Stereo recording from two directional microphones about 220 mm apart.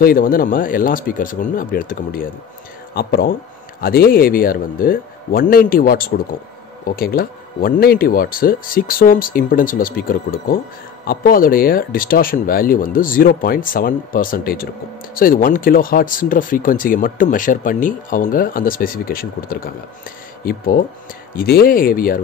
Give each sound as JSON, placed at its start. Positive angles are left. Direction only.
{"t": 0.0, "sound": "speech", "side_deg": 40}